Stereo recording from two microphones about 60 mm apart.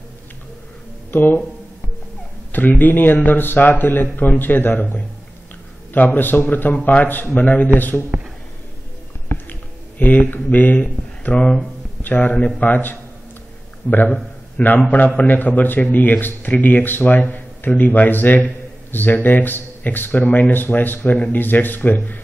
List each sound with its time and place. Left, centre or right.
1.1 s speech: left
2.5 s a man's voice: left
5.9 s a man's voice: left
9.3 s a sound: left
12.0 s a man's voice: left